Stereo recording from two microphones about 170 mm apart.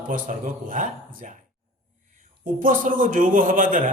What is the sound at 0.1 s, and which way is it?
A man's voice, 50° right (ahead or behind).